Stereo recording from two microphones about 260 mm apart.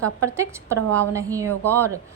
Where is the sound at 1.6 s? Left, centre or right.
Centre.